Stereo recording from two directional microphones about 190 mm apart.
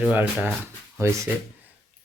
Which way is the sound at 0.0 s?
10° right (ahead or behind).